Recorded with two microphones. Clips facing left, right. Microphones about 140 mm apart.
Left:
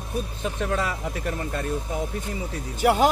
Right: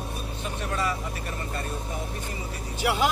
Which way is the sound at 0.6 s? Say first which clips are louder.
Left 2 dB; 90° left.